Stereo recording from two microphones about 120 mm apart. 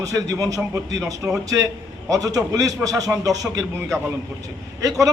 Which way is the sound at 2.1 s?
30° right (ahead or behind).